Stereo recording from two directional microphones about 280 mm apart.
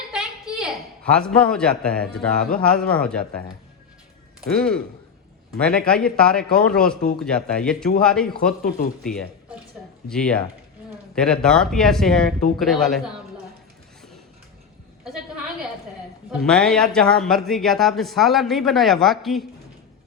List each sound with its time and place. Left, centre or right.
0.1 s a woman's voice: centre
4.4 s speech: centre
16.4 s speech: centre